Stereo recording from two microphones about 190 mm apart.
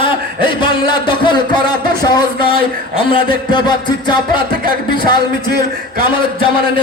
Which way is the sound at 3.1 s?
25° left (ahead or behind).